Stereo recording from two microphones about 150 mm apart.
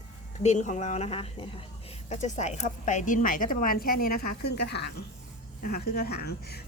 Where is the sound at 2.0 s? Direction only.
50° left (ahead or behind).